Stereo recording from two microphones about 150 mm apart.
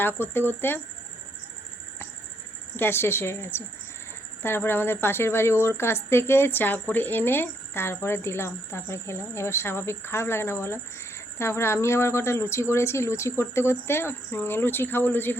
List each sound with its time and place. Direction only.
0.2 s speech: 15° left (ahead or behind)
2.7 s speech: 15° left (ahead or behind)